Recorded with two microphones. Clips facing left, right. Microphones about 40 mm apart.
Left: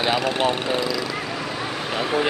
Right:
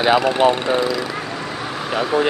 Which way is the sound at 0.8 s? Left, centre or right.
Centre.